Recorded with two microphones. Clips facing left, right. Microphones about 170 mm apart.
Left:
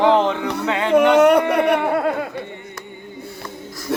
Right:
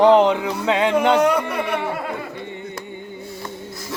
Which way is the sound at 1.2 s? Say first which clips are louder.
Left 5 dB; 65° left (ahead or behind).